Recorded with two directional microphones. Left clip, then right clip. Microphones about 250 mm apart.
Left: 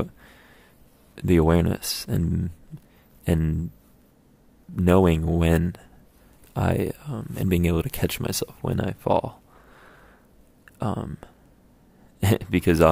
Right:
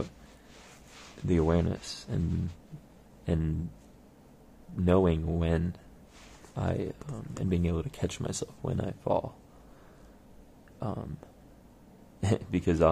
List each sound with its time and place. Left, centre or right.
1.2 s speech: left
3.3 s speech: left
4.7 s speech: left
10.8 s speech: left